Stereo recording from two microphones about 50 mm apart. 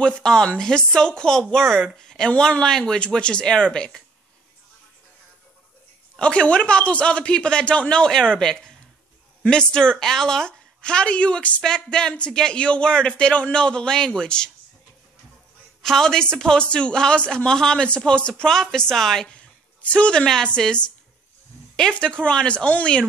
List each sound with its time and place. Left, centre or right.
0.0 s a man's voice: centre
6.1 s a man's voice: left
15.8 s speech: centre
19.3 s speech: left
21.9 s a man's voice: left